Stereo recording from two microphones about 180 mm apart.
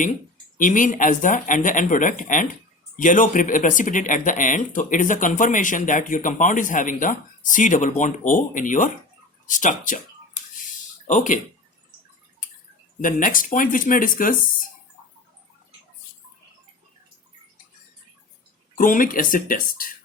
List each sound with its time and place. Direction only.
0.6 s speech: 45° left (ahead or behind)
13.0 s speech: 45° left (ahead or behind)
18.8 s speech: 50° left (ahead or behind)